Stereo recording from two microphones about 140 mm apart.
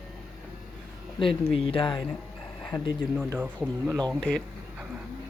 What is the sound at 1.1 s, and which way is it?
Speech, 40° left (ahead or behind).